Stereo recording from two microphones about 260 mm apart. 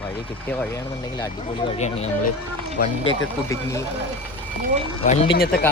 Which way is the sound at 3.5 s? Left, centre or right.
Centre.